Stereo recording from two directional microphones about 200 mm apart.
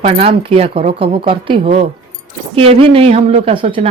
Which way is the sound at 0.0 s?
30° right (ahead or behind).